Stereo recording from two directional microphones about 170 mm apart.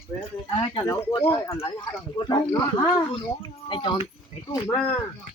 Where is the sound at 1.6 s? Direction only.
25° left (ahead or behind).